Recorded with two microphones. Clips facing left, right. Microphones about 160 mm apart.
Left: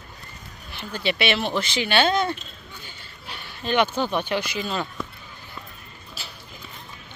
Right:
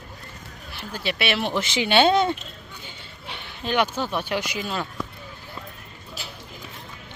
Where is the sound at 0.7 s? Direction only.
5° right (ahead or behind); by 2.3 s 20° right (ahead or behind).